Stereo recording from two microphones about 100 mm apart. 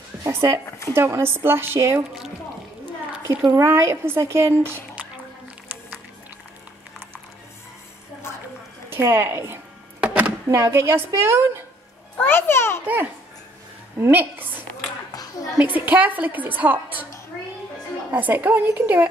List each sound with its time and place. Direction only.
0.3 s a woman's voice: 25° right (ahead or behind)
0.7 s a sound: 30° left (ahead or behind)
0.9 s a woman's voice: 25° right (ahead or behind)
3.5 s a woman's voice: 30° right (ahead or behind)
8.9 s a woman's voice: 25° right (ahead or behind)
10.0 s a sound: 15° right (ahead or behind)
10.5 s a woman's voice: 30° right (ahead or behind)
12.2 s a child's voice: 25° left (ahead or behind)
12.8 s a woman's voice: 15° right (ahead or behind)
15.6 s a woman's voice: 15° right (ahead or behind)
18.1 s a woman's voice: 20° right (ahead or behind)